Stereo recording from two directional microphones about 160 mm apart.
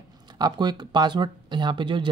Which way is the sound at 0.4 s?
25° right (ahead or behind).